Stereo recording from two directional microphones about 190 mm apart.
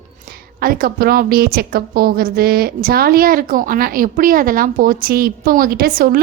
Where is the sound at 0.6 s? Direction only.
50° right (ahead or behind).